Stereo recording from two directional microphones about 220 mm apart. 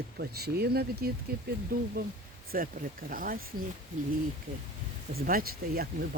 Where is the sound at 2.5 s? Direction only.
40° right (ahead or behind).